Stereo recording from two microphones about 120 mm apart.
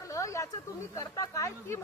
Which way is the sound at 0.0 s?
25° left (ahead or behind).